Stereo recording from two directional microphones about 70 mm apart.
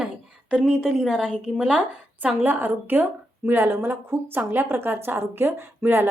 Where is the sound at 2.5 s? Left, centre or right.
Right.